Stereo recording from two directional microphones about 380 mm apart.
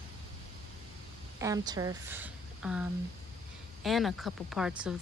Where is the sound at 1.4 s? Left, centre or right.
Centre.